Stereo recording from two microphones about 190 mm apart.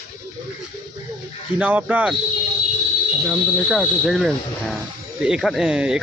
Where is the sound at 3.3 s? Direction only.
Centre (ahead or behind).